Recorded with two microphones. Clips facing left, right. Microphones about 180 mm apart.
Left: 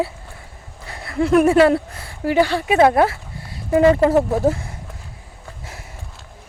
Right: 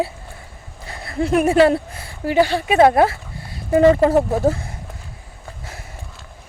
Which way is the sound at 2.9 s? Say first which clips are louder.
Right 1 dB; 35° right (ahead or behind).